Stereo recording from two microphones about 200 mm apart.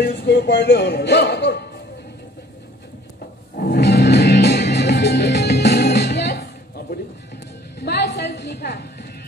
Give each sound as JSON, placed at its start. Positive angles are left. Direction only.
{"t": 0.0, "sound": "speech", "side_deg": 55}
{"t": 3.5, "sound": "music", "side_deg": 50}
{"t": 7.8, "sound": "speech", "side_deg": 55}